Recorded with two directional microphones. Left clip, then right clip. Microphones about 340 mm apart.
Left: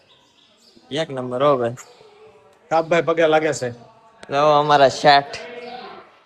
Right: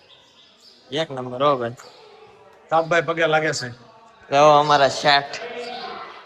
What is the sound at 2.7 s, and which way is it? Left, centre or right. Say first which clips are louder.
Speech: left 1 dB; left.